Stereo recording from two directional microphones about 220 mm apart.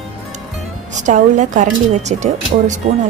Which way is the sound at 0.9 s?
35° right (ahead or behind).